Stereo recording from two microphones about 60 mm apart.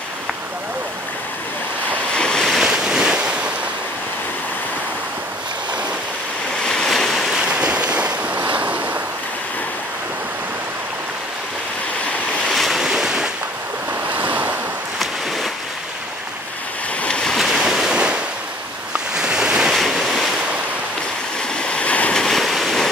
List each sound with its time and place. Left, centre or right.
2.1 s waves: centre
2.6 s waves: centre
6.6 s waves: centre
7.4 s waves: centre
12.4 s waves: centre
14.1 s waves: right
17.0 s waves: centre
17.5 s waves: centre
19.7 s waves: centre
21.5 s waves: centre
22.1 s waves: centre